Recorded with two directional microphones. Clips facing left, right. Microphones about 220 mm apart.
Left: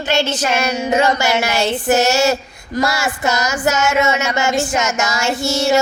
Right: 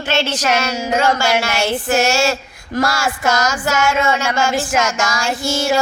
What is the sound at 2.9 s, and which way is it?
Child singing, 20° left (ahead or behind).